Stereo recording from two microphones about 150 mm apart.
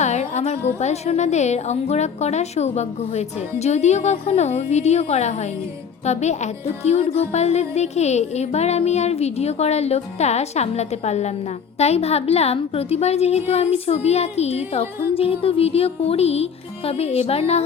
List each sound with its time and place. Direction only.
0.0 s a woman's voice: 50° left (ahead or behind)